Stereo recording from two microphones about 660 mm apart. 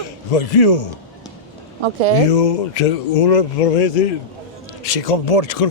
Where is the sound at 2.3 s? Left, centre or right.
Left.